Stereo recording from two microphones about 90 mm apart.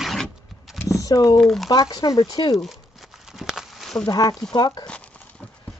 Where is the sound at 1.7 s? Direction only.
45° left (ahead or behind).